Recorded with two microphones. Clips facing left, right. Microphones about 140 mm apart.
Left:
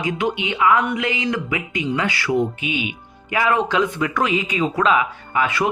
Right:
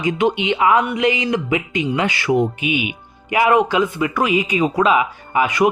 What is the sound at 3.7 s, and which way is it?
Speech, 5° right (ahead or behind).